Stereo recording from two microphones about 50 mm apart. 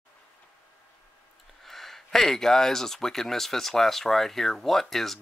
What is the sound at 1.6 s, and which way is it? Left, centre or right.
Speech, centre.